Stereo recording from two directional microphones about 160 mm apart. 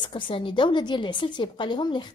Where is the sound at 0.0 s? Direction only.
30° left (ahead or behind).